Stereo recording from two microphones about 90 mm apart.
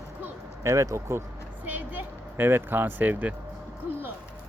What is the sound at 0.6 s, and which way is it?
Speech, 35° right (ahead or behind).